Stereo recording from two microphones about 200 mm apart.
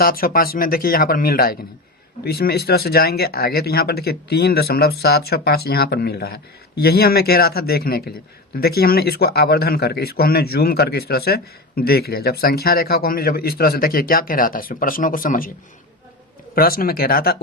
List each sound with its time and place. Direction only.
0.0 s a man's voice: 45° left (ahead or behind)
16.6 s a man's voice: 45° left (ahead or behind)